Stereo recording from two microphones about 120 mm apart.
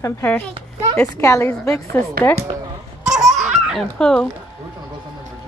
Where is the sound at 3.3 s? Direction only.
75° right (ahead or behind).